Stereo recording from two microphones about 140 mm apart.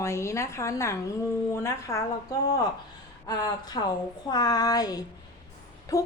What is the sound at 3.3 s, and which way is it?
A woman's voice, 30° left (ahead or behind).